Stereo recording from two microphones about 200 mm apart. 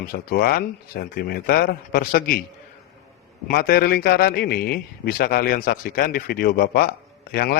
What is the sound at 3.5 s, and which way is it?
A man's voice, 50° left (ahead or behind).